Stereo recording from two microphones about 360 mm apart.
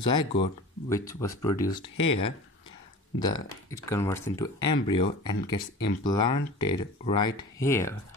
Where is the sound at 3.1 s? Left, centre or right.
Centre.